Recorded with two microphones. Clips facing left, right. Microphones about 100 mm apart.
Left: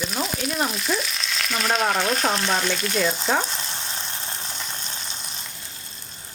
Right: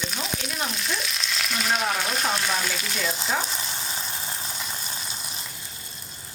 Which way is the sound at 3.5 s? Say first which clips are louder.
Even; centre (ahead or behind).